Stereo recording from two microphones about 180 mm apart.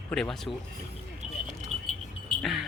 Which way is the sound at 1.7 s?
35° right (ahead or behind).